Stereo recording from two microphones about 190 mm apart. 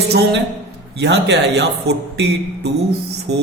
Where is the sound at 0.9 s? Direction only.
65° right (ahead or behind).